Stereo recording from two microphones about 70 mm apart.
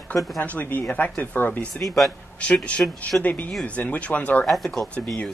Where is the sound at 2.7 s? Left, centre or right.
Centre.